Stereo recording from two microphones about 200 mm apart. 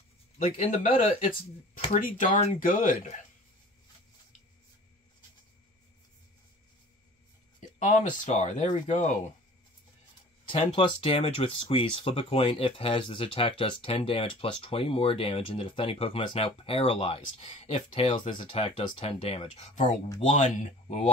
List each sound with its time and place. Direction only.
0.6 s speech: 40° left (ahead or behind)
7.8 s speech: 35° left (ahead or behind)
10.5 s speech: 25° left (ahead or behind)